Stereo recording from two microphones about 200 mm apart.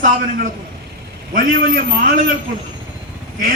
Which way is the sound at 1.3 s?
45° right (ahead or behind).